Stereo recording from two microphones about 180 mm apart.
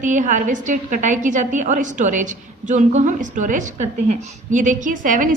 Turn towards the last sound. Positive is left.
turn(degrees=-50)  # may be behind; listen again after turning